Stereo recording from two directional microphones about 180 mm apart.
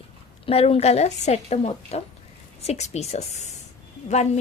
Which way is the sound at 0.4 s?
35° left (ahead or behind).